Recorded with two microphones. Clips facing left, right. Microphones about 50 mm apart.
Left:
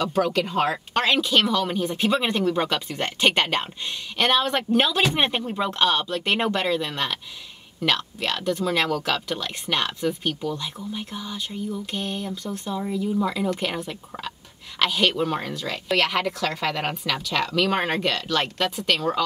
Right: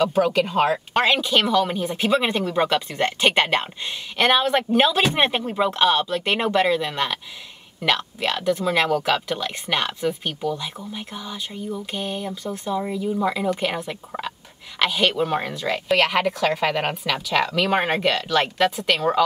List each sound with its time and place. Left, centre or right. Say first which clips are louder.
0.0 s a woman's voice: right 3 dB; centre
8.3 s a woman's voice: right 3 dB; centre
13.7 s speech: right 3 dB; right
14.8 s a woman's voice: right 1 dB; centre